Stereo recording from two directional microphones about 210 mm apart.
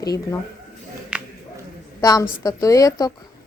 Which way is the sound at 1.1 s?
5° right (ahead or behind).